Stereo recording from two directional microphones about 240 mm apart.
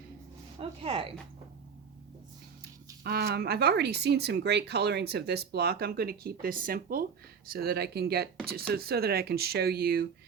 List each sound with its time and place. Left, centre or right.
0.6 s speech: right
3.0 s speech: right